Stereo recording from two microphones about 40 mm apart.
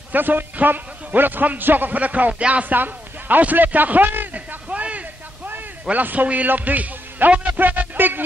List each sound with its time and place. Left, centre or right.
0.1 s a man's voice: right
2.0 s a man's voice: right
4.6 s a sound: right
5.9 s a man's voice: right